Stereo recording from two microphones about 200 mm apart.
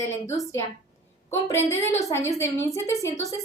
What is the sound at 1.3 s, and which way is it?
A woman's voice, 15° left (ahead or behind).